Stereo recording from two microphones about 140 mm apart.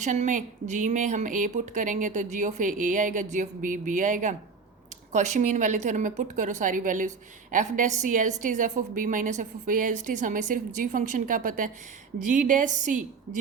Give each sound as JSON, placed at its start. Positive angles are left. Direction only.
{"t": 0.0, "sound": "a woman's voice", "side_deg": -60}